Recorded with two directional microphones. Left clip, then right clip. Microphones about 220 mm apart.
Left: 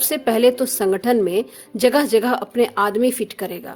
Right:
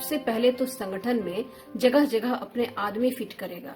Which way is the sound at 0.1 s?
50° left (ahead or behind).